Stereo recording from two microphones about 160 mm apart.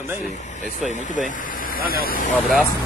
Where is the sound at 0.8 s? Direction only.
50° left (ahead or behind).